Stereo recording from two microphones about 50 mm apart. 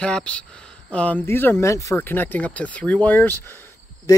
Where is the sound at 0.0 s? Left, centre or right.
Left.